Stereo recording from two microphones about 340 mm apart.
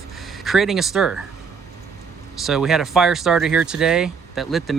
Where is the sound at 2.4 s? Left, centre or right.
Centre.